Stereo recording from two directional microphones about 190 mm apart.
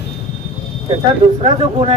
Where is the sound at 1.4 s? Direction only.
30° right (ahead or behind).